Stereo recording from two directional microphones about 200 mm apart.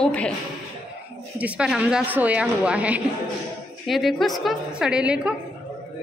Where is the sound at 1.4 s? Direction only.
5° right (ahead or behind).